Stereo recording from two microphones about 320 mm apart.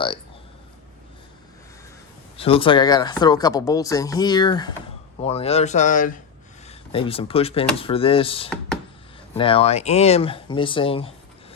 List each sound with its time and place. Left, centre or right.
2.3 s speech: centre